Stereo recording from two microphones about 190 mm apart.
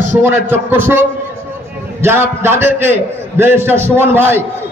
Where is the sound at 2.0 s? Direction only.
15° right (ahead or behind).